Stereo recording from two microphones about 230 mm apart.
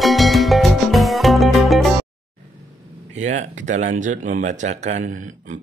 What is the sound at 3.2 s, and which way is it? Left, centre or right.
Speech, right.